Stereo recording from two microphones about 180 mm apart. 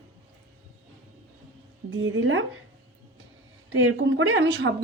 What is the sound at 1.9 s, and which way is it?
Speech, 90° right.